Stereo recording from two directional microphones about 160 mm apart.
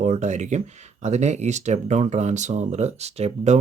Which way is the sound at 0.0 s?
45° right (ahead or behind).